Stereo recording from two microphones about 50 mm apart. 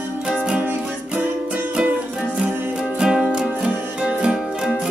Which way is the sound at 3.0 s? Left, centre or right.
Centre.